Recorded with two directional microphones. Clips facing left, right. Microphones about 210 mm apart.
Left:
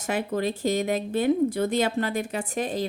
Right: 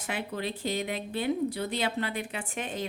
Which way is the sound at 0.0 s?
45° left (ahead or behind).